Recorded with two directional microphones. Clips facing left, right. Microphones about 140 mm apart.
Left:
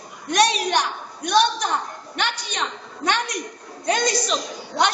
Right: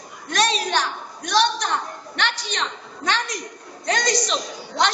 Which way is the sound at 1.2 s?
10° left (ahead or behind).